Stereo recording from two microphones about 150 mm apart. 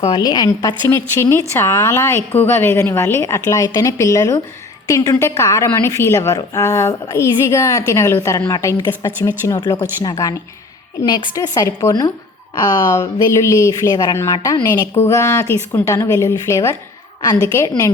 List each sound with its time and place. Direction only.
0.1 s a woman's voice: 25° left (ahead or behind)